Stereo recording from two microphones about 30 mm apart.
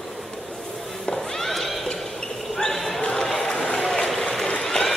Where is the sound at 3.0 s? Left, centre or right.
Left.